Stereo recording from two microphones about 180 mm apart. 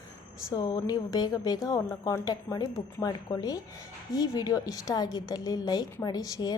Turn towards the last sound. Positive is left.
turn(degrees=20)  # may be behind; listen again after turning